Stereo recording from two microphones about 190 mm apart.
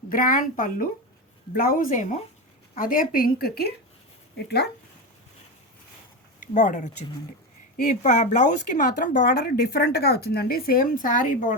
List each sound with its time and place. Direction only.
0.1 s a woman's voice: 45° left (ahead or behind)
6.4 s a woman's voice: 40° left (ahead or behind)